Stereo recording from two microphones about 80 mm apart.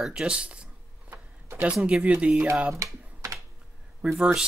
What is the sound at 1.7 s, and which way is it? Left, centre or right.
Speech, centre.